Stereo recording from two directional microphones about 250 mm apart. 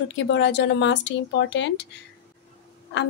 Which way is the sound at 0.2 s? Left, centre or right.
Left.